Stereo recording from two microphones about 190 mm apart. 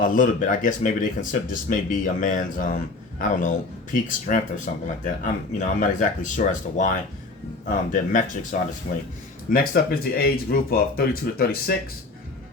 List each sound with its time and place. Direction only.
0.0 s speech: 45° left (ahead or behind)
7.9 s speech: 45° left (ahead or behind)